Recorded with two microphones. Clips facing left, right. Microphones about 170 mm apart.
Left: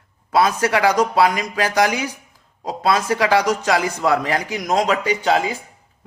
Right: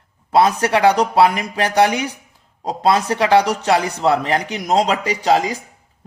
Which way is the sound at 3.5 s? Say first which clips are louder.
Right 2 dB; 30° right (ahead or behind).